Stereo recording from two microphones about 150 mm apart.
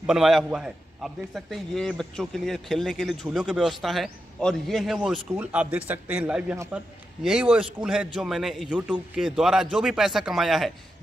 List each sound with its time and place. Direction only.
0.0 s a man's voice: 5° right (ahead or behind)